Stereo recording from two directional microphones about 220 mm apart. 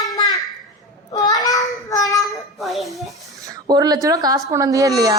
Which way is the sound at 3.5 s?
15° right (ahead or behind).